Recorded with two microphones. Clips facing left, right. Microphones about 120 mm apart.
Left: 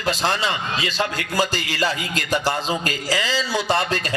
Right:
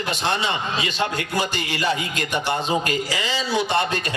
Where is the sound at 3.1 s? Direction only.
90° left.